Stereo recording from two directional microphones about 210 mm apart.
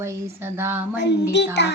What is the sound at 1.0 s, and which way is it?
Child singing, 55° left (ahead or behind).